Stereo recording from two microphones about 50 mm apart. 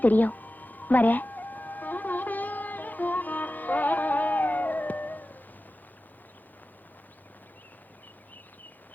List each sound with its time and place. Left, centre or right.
0.0 s music: left